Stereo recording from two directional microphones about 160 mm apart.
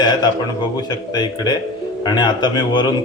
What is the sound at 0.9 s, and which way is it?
A man's voice, 25° left (ahead or behind).